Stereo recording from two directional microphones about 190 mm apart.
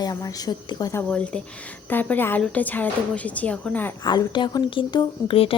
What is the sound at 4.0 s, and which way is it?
A woman's voice, 20° left (ahead or behind).